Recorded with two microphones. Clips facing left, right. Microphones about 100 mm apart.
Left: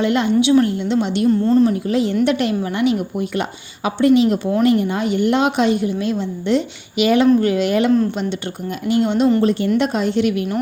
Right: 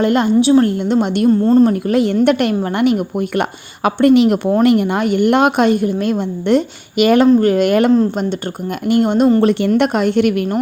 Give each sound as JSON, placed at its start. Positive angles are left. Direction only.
{"t": 0.0, "sound": "a woman's voice", "side_deg": -45}
{"t": 0.8, "sound": "a woman's voice", "side_deg": -50}
{"t": 7.3, "sound": "a woman's voice", "side_deg": -40}
{"t": 9.4, "sound": "a woman's voice", "side_deg": -65}